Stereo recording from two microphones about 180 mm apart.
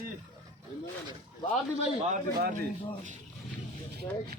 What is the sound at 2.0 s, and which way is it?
Speech, 50° right (ahead or behind).